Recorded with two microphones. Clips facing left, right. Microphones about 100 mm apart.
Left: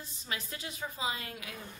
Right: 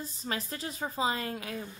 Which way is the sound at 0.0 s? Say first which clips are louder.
Right 5 dB; 40° right (ahead or behind).